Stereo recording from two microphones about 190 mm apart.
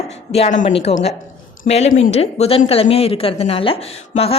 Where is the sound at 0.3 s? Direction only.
35° left (ahead or behind).